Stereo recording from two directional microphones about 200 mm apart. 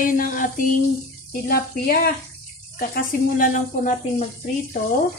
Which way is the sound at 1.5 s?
50° left (ahead or behind).